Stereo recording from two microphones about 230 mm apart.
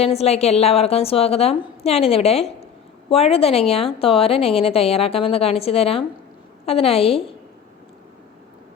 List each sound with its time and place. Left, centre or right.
0.0 s a woman's voice: left